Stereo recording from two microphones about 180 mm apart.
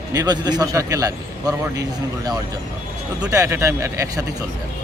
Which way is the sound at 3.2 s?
20° right (ahead or behind).